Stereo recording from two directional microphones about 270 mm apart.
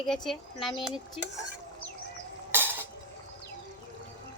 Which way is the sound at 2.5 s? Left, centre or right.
Centre.